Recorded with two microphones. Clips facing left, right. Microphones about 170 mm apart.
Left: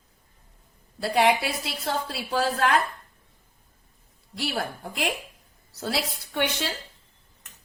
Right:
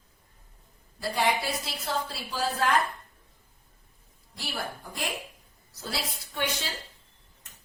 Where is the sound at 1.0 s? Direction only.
70° left (ahead or behind).